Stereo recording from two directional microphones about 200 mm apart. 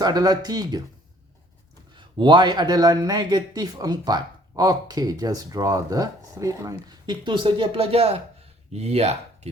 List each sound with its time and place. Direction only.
0.0 s a man's voice: 20° right (ahead or behind)
2.0 s a man's voice: 25° right (ahead or behind)